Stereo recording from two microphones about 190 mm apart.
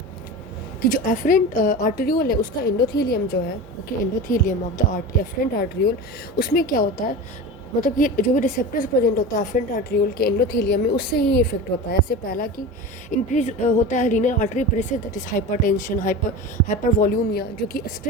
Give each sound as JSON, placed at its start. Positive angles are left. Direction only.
{"t": 0.8, "sound": "a woman's voice", "side_deg": 45}
{"t": 4.3, "sound": "a woman's voice", "side_deg": 45}
{"t": 13.1, "sound": "a woman's voice", "side_deg": 40}